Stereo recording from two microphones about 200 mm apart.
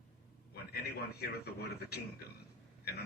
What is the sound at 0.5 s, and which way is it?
Speech, 50° left (ahead or behind).